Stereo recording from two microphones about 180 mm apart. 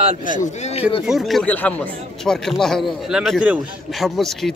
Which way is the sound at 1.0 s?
Centre (ahead or behind).